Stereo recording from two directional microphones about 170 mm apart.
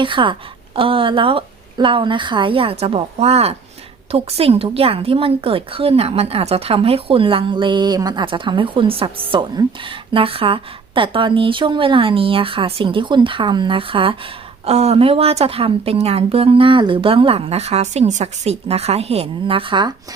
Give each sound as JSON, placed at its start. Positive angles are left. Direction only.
{"t": 0.0, "sound": "a woman's voice", "side_deg": -30}